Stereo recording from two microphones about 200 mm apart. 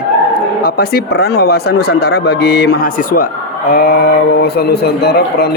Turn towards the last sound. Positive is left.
turn(degrees=55)  # may be behind; listen again after turning